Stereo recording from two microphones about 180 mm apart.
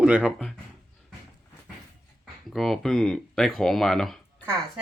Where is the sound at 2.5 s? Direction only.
Centre (ahead or behind).